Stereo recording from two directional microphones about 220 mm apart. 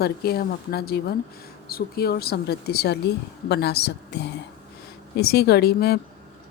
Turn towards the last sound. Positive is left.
turn(degrees=45)  # may be behind; listen again after turning